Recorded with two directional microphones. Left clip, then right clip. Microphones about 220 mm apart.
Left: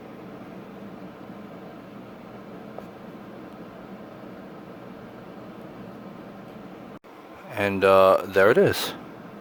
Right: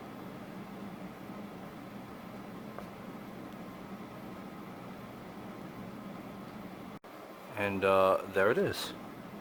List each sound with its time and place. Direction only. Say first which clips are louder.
7.5 s speech: left 10 dB; 35° left (ahead or behind)